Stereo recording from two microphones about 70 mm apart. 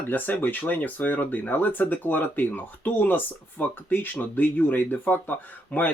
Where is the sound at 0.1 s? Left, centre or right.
Left.